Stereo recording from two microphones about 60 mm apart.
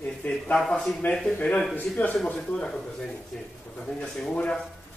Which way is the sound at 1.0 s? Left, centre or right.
Left.